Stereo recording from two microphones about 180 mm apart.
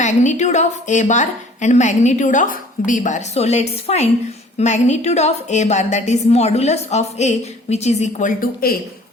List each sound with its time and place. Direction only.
0.0 s a woman's voice: 40° left (ahead or behind)